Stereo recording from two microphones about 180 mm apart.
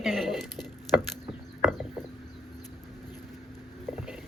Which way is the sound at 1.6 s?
Centre (ahead or behind).